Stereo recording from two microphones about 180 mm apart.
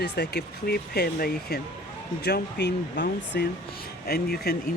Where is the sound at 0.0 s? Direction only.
65° left (ahead or behind).